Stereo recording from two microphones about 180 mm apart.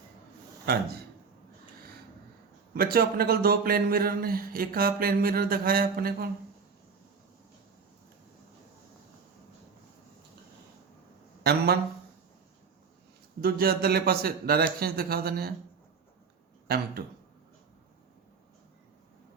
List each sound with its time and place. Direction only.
0.6 s speech: 60° right (ahead or behind)
2.7 s speech: 55° right (ahead or behind)
11.4 s speech: 60° right (ahead or behind)
13.4 s speech: 55° right (ahead or behind)
16.6 s speech: 60° right (ahead or behind)